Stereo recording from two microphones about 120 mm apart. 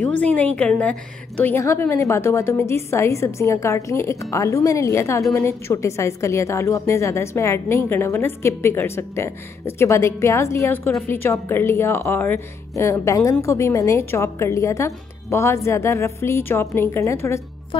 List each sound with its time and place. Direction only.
0.0 s a woman's voice: 10° left (ahead or behind)